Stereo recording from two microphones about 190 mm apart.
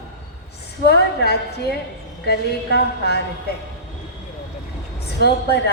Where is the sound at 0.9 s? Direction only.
60° left (ahead or behind).